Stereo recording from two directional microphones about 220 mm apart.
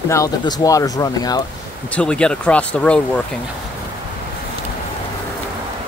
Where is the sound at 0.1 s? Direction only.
15° left (ahead or behind).